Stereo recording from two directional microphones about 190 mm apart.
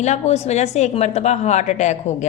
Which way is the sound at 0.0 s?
35° left (ahead or behind).